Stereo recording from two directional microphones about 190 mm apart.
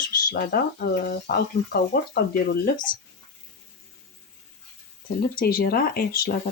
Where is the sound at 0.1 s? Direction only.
50° left (ahead or behind).